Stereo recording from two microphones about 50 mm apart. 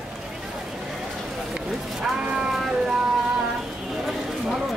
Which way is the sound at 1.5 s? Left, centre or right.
Centre.